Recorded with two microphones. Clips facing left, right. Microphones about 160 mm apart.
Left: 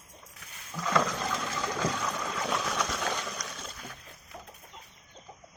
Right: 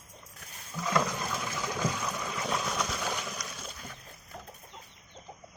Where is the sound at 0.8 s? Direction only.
10° right (ahead or behind).